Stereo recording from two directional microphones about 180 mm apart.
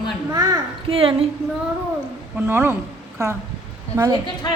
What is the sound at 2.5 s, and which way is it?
A woman's voice, 15° right (ahead or behind).